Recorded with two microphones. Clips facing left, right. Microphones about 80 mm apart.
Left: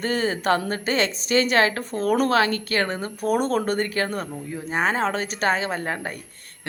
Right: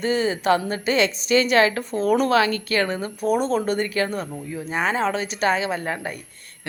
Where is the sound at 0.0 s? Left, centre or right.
Left.